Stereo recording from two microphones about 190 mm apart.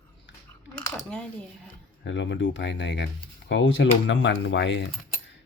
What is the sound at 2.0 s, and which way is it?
Speech, 70° left (ahead or behind).